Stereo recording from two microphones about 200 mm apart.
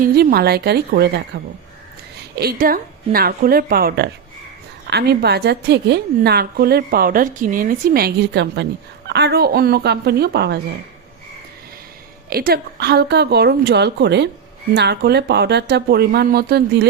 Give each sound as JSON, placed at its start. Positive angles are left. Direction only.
{"t": 0.0, "sound": "a woman's voice", "side_deg": -50}
{"t": 2.3, "sound": "a woman's voice", "side_deg": -50}
{"t": 12.3, "sound": "a woman's voice", "side_deg": -50}